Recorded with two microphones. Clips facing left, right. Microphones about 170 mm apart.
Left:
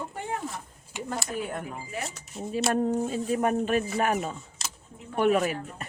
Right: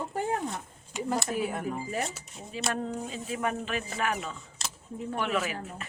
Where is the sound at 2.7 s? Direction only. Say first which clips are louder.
Left 7 dB; 45° left (ahead or behind).